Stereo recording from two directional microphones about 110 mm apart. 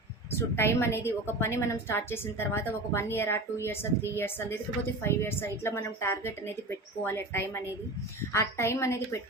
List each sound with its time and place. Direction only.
0.3 s a woman's voice: 20° left (ahead or behind)